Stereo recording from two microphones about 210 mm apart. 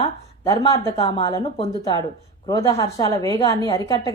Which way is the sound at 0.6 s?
15° left (ahead or behind).